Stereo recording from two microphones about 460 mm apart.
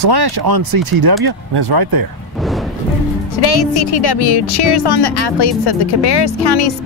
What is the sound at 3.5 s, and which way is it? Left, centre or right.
A woman's voice, left.